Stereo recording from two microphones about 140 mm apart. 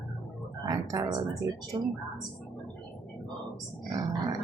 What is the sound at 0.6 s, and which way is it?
Speech, 25° right (ahead or behind).